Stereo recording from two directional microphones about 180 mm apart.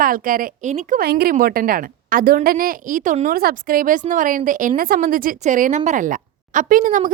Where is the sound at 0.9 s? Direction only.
60° right (ahead or behind).